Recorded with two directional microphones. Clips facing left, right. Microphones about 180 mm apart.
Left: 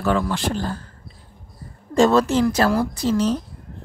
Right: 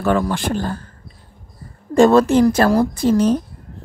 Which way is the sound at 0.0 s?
50° right (ahead or behind).